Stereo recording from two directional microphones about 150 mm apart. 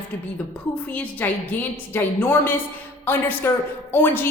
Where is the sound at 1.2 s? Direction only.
10° left (ahead or behind).